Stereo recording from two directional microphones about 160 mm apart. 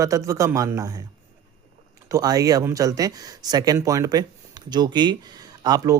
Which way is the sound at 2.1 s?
20° right (ahead or behind).